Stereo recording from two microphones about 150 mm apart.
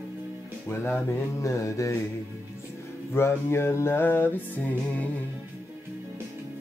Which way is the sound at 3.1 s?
15° left (ahead or behind).